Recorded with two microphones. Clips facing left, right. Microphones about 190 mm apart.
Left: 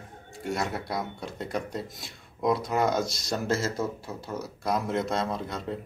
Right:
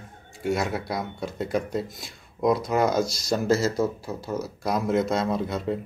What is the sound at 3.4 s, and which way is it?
Speech, 35° right (ahead or behind).